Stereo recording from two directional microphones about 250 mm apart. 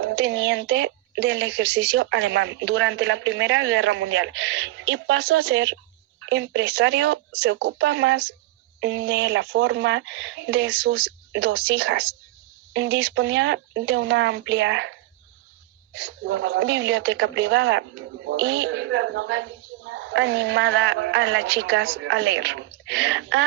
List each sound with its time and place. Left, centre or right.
0.0 s a woman's voice: right
16.0 s a woman's voice: right